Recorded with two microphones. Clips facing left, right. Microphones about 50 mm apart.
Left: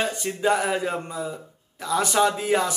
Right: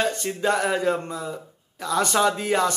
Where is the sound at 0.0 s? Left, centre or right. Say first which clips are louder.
Right 1 dB; centre.